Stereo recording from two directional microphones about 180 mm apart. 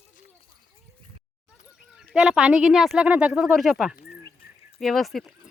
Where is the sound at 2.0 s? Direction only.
5° right (ahead or behind).